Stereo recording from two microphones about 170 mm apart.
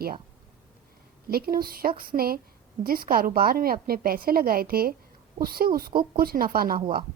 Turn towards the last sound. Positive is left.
turn(degrees=-60)  # may be behind; listen again after turning